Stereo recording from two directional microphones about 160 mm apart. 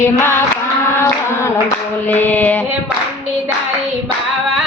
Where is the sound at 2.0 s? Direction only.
10° left (ahead or behind).